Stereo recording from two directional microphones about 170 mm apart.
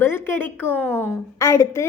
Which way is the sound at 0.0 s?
15° left (ahead or behind).